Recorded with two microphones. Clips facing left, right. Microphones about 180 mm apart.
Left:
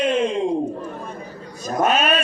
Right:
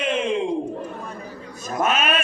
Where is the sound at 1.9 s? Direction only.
35° left (ahead or behind).